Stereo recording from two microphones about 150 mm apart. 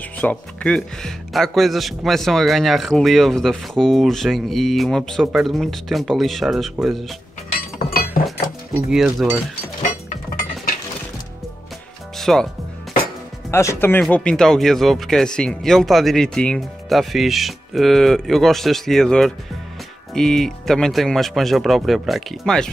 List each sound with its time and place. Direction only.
0.2 s speech: 10° left (ahead or behind)
7.8 s chink: 70° left (ahead or behind)
8.9 s speech: centre (ahead or behind)
12.2 s speech: 5° left (ahead or behind)
13.5 s speech: 20° left (ahead or behind); by 22.7 s 5° left (ahead or behind)